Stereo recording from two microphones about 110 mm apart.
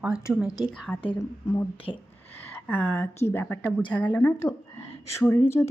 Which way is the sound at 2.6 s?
20° left (ahead or behind).